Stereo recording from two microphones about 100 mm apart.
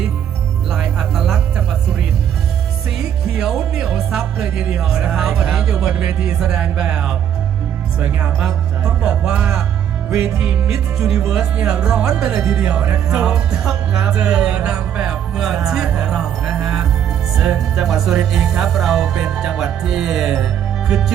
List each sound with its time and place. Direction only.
0.7 s music: 5° right (ahead or behind)
3.0 s speech: 5° right (ahead or behind)
7.9 s music: 15° right (ahead or behind)